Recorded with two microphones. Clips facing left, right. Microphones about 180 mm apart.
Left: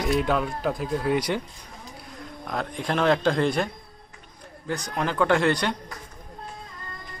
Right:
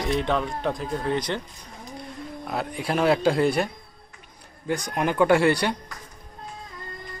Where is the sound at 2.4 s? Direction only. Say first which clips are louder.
Even; 5° right (ahead or behind).